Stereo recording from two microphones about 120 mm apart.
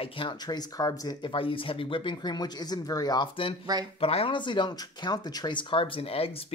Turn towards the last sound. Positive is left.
turn(degrees=55)  # may be behind; listen again after turning